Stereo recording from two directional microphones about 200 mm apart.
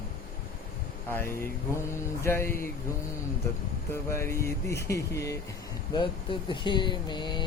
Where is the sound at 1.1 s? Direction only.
10° left (ahead or behind).